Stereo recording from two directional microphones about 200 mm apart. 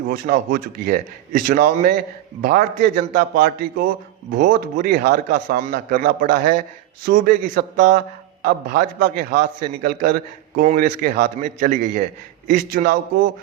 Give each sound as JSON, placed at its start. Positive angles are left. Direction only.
{"t": 0.1, "sound": "a man's voice", "side_deg": -50}
{"t": 4.3, "sound": "a man's voice", "side_deg": -50}